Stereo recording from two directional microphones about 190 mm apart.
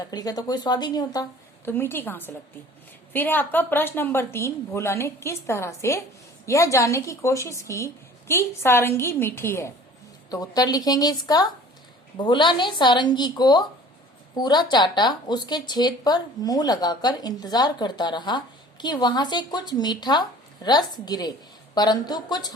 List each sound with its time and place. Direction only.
0.0 s a woman's voice: 20° left (ahead or behind)